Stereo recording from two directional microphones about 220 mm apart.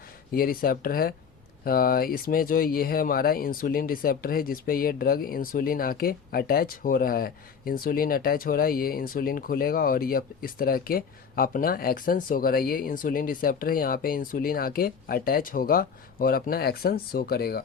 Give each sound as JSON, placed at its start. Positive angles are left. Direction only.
{"t": 0.3, "sound": "speech", "side_deg": 40}